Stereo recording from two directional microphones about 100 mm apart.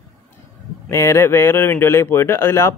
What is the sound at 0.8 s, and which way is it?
Speech, 30° left (ahead or behind).